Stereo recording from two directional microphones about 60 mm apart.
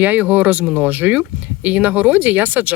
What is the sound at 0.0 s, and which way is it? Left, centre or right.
Speech, right.